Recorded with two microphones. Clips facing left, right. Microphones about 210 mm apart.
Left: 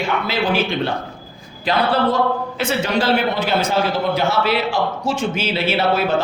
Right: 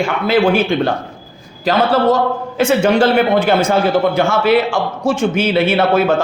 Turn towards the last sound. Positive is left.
turn(degrees=-50)  # may be behind; listen again after turning